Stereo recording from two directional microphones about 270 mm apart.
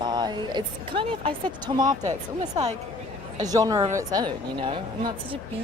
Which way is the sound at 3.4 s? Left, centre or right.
Centre.